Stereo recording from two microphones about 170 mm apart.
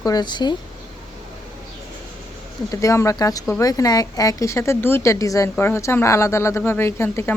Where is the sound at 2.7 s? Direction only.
15° left (ahead or behind).